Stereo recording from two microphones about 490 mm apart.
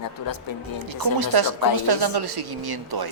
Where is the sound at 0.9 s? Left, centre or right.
Right.